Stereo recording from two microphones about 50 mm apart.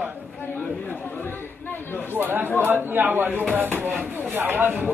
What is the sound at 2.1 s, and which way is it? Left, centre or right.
Speech, right.